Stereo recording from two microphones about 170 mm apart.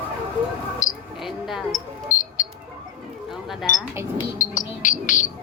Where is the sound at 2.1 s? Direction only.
50° left (ahead or behind).